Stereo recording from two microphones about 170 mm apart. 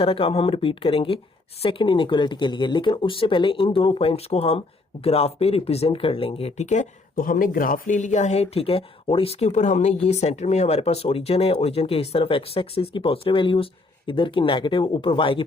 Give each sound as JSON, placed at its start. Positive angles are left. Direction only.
{"t": 0.0, "sound": "speech", "side_deg": 35}